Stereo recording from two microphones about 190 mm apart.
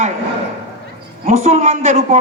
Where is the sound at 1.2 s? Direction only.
35° right (ahead or behind).